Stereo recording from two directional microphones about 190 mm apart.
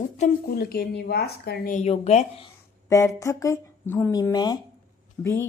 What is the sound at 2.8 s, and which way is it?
Speech, 15° left (ahead or behind).